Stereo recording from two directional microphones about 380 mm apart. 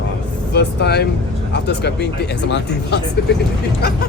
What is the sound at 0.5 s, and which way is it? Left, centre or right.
Vehicle, left.